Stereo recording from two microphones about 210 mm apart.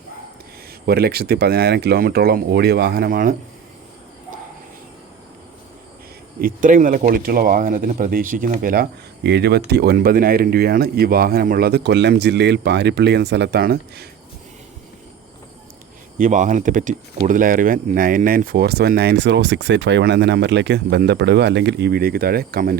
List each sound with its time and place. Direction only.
0.9 s speech: 50° right (ahead or behind)
6.4 s speech: 40° right (ahead or behind)
16.1 s speech: 40° right (ahead or behind)